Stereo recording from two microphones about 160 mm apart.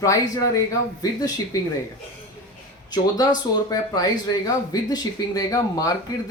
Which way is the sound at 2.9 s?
25° left (ahead or behind).